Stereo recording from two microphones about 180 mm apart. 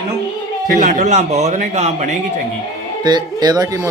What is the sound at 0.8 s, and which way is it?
Speech, 40° right (ahead or behind).